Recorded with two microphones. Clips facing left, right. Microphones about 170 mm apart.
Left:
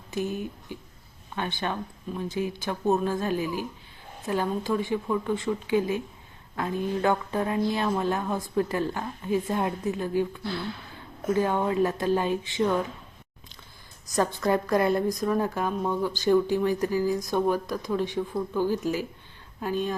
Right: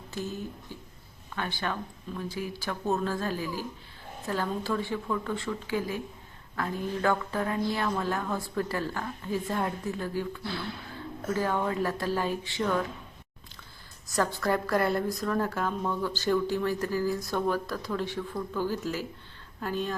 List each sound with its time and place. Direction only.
0.1 s a woman's voice: 15° left (ahead or behind)
14.2 s a woman's voice: 20° left (ahead or behind)